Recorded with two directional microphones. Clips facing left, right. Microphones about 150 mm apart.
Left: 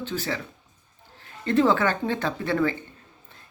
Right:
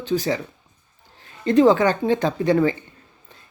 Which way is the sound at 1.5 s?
15° right (ahead or behind).